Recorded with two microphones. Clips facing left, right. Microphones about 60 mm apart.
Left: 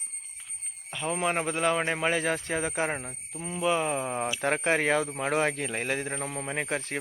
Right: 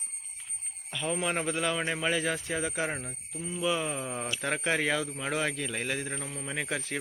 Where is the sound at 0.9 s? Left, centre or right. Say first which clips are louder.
Left 2 dB; left.